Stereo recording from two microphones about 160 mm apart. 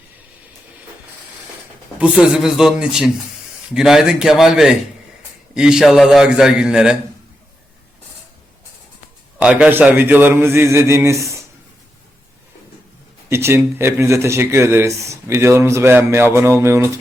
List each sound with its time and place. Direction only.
2.2 s a man's voice: 5° right (ahead or behind)
9.4 s speech: 10° right (ahead or behind)
13.3 s speech: 15° right (ahead or behind)